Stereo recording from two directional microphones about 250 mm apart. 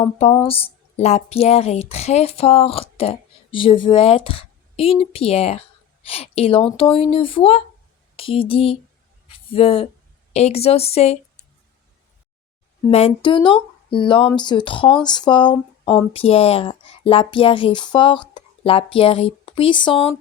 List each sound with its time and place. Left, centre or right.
0.0 s speech: left
12.9 s speech: left